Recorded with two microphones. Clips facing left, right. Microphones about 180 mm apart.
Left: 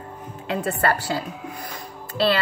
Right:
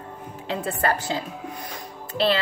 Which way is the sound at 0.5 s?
20° right (ahead or behind).